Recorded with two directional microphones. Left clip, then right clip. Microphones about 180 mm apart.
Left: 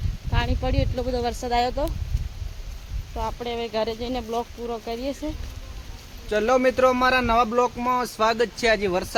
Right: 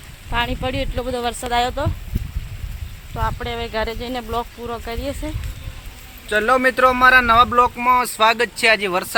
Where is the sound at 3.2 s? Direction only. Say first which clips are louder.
Right 4 dB; centre (ahead or behind).